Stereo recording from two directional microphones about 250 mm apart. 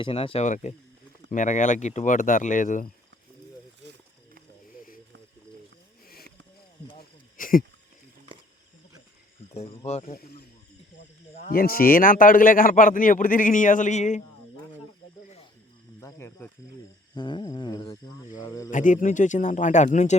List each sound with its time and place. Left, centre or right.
0.0 s a man's voice: left
4.7 s snake: left
7.3 s a sound: left
9.6 s speech: left
10.1 s a man's voice: left
11.4 s a man's voice: left
16.0 s speech: centre
18.7 s a man's voice: left